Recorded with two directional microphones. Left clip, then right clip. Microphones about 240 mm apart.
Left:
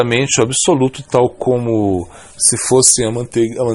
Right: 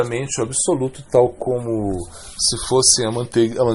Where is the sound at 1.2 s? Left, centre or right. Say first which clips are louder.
Left 4 dB; left.